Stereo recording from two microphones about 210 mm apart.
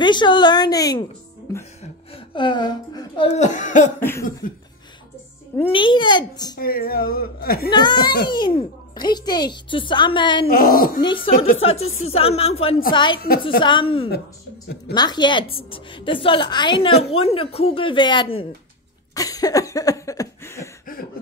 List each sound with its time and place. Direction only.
0.0 s a woman's voice: 20° left (ahead or behind)
2.1 s speech: 25° left (ahead or behind)
3.3 s speech: 35° left (ahead or behind)
4.0 s cough: 10° left (ahead or behind)
5.7 s a woman's voice: 25° left (ahead or behind)
6.5 s a woman's voice: 45° left (ahead or behind)
7.7 s a woman's voice: 20° left (ahead or behind)
10.5 s a woman's voice: 40° left (ahead or behind)
11.0 s a woman's voice: 20° left (ahead or behind)
19.1 s cough: 15° left (ahead or behind)
20.8 s a sound: 45° left (ahead or behind)